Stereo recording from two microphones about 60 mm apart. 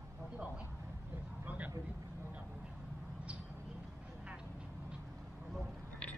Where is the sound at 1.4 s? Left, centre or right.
Right.